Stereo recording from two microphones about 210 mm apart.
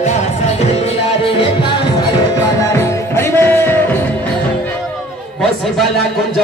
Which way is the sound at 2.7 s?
10° left (ahead or behind).